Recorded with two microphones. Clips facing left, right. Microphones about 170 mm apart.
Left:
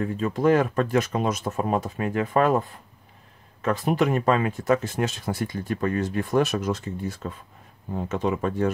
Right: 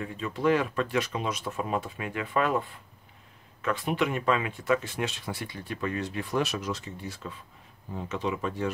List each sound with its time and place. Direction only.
0.0 s speech: 45° left (ahead or behind)
3.6 s speech: 40° left (ahead or behind)